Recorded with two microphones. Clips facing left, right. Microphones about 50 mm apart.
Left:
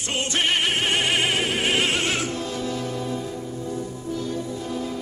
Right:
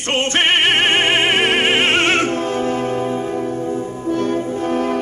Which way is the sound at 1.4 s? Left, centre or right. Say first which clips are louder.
Right 7 dB; right.